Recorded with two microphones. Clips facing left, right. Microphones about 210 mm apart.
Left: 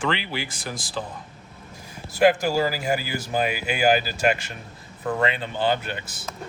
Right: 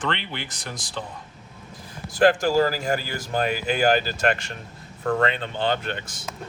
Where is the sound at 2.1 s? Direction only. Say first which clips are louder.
Right 1 dB; 10° left (ahead or behind).